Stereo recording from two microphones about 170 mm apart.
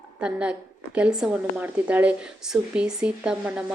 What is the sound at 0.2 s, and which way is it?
A woman's voice, 5° right (ahead or behind).